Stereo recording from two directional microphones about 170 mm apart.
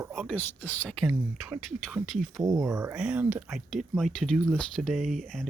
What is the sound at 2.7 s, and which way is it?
Speech, 20° right (ahead or behind).